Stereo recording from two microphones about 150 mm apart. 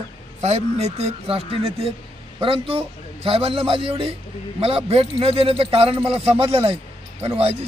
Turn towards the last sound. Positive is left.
turn(degrees=-40)  # may be behind; listen again after turning